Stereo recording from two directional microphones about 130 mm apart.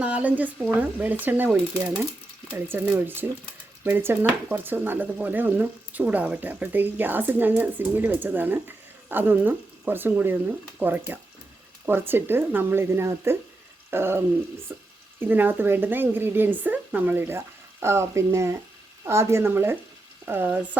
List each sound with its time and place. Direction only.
0.0 s speech: 10° right (ahead or behind)